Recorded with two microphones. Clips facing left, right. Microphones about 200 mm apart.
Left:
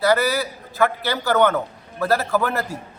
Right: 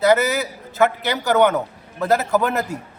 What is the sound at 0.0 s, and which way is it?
Speech, 20° right (ahead or behind).